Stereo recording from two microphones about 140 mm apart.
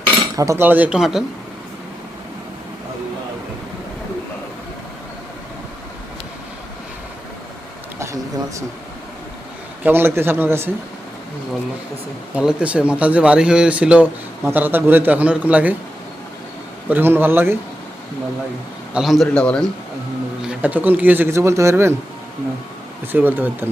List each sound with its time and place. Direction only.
0.3 s speech: 20° right (ahead or behind); by 1.2 s 5° right (ahead or behind)
7.9 s a sound: 20° right (ahead or behind)
9.8 s speech: 15° right (ahead or behind)
12.3 s speech: 5° right (ahead or behind)
16.9 s speech: 15° right (ahead or behind)
18.9 s a man's voice: centre (ahead or behind)
20.4 s speech: 10° right (ahead or behind)
23.1 s speech: 15° right (ahead or behind)